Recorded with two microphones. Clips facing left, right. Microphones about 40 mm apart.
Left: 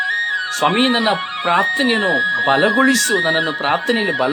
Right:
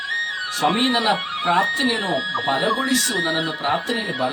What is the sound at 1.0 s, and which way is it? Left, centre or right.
Speech, left.